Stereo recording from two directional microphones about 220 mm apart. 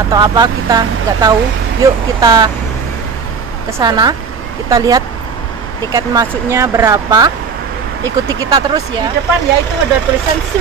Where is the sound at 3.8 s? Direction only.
20° right (ahead or behind).